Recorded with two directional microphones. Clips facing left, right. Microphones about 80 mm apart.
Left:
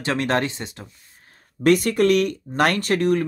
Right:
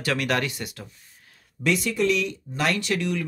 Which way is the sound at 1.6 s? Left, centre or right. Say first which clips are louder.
Left 6 dB; left.